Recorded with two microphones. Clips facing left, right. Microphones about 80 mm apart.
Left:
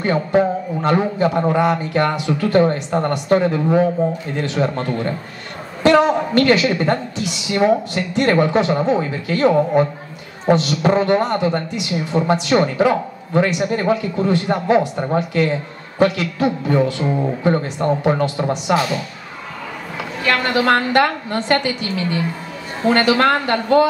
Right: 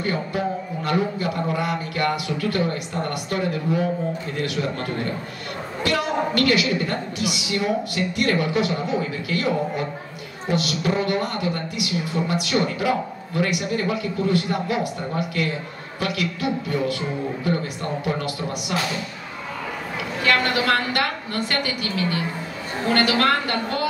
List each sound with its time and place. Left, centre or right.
0.0 s a man's voice: left
20.2 s a man's voice: left